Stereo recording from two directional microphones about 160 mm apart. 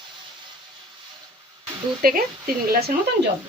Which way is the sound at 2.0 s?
65° right (ahead or behind).